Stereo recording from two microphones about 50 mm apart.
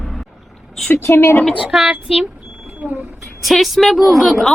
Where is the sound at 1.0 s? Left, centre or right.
Left.